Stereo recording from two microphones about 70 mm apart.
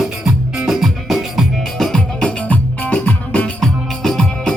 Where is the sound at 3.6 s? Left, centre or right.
Centre.